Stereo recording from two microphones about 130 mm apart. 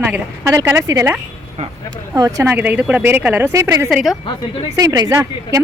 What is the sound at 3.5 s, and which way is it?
Speech, 25° right (ahead or behind).